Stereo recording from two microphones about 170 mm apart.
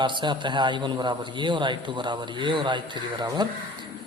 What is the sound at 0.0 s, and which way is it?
A man's voice, 25° right (ahead or behind).